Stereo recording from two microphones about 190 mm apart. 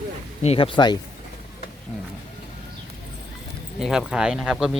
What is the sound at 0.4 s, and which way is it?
Speech, 30° left (ahead or behind).